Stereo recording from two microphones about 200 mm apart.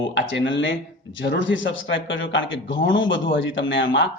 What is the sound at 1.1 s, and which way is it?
A man's voice, 65° left (ahead or behind).